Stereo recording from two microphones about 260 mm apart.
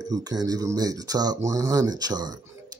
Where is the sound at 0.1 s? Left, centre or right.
Centre.